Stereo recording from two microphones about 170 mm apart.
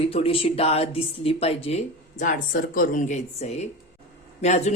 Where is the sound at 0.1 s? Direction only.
35° left (ahead or behind).